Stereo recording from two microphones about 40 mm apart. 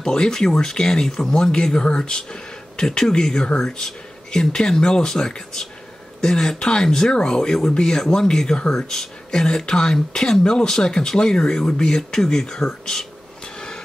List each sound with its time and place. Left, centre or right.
0.0 s speech: centre
1.5 s speech: left